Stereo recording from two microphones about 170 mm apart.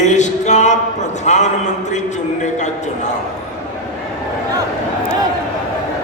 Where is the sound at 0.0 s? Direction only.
45° left (ahead or behind).